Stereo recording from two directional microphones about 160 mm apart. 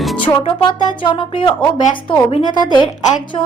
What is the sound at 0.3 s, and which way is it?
A woman's voice, 30° left (ahead or behind).